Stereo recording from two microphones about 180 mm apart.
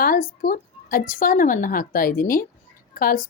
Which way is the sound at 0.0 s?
50° left (ahead or behind).